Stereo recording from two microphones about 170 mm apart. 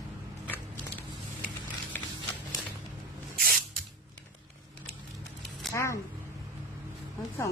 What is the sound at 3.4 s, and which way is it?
Spray, 60° right (ahead or behind).